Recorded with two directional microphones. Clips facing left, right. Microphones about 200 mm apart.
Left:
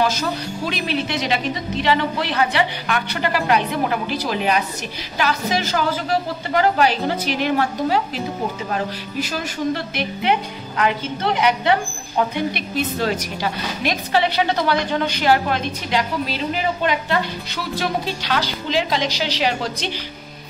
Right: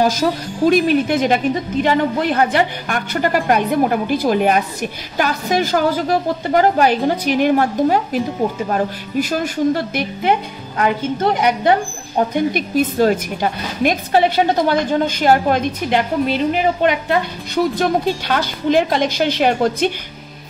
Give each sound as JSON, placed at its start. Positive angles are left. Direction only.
{"t": 0.7, "sound": "a woman's voice", "side_deg": -45}